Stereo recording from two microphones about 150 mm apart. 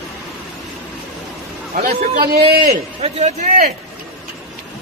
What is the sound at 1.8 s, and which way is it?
Speech, 75° right (ahead or behind).